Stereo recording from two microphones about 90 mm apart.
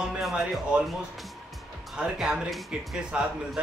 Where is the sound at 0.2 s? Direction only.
5° right (ahead or behind).